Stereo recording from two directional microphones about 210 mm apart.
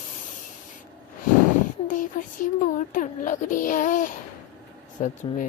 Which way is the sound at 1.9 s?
40° left (ahead or behind).